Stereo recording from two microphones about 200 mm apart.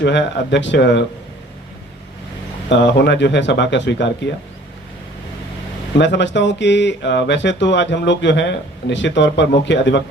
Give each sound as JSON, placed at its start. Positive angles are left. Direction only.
{"t": 0.0, "sound": "speech", "side_deg": 60}
{"t": 2.6, "sound": "speech", "side_deg": 60}
{"t": 6.0, "sound": "speech", "side_deg": 60}